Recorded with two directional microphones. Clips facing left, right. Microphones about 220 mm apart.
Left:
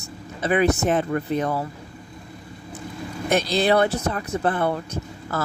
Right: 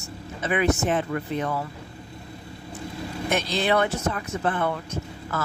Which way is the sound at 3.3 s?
35° left (ahead or behind).